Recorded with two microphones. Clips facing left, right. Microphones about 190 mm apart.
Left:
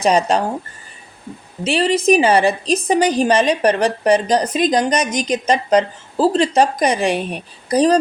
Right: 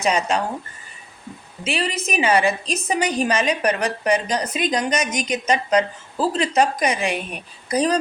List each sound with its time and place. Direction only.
0.0 s a woman's voice: 35° left (ahead or behind)
1.6 s a woman's voice: 30° left (ahead or behind)